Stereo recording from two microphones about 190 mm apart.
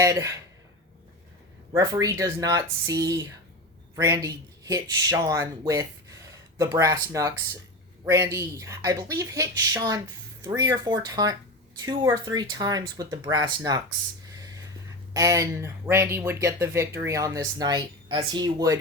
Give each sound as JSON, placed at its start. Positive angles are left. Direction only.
{"t": 0.0, "sound": "speech", "side_deg": -15}
{"t": 1.7, "sound": "speech", "side_deg": -20}
{"t": 15.1, "sound": "speech", "side_deg": -15}